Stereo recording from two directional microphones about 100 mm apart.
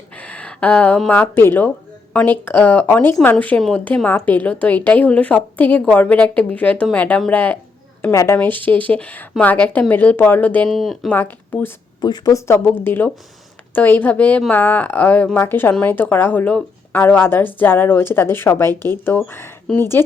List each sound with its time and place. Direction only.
0.2 s a woman's voice: 10° left (ahead or behind)
8.1 s a woman's voice: 30° left (ahead or behind)
8.4 s a woman's voice: 20° left (ahead or behind)
10.7 s speech: centre (ahead or behind)
11.1 s speech: 20° left (ahead or behind)
11.9 s a woman's voice: 45° left (ahead or behind)
12.3 s a woman's voice: 30° left (ahead or behind)